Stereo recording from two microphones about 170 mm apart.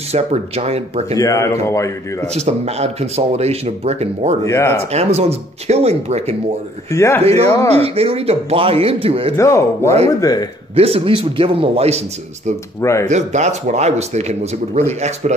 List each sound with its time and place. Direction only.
0.1 s speech: 40° right (ahead or behind)
1.1 s speech: 20° left (ahead or behind)
2.3 s speech: 40° right (ahead or behind)
4.5 s speech: 15° left (ahead or behind)
4.9 s speech: 40° right (ahead or behind)
6.9 s speech: 15° left (ahead or behind)
7.7 s speech: 35° right (ahead or behind)
9.4 s speech: 15° left (ahead or behind)
10.8 s speech: 35° right (ahead or behind)
12.8 s speech: 15° left (ahead or behind)
13.1 s speech: 45° right (ahead or behind)